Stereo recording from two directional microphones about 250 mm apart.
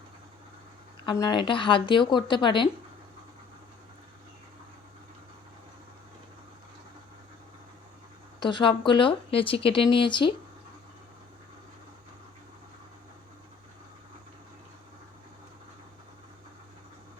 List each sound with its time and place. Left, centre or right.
1.0 s speech: centre
8.4 s speech: centre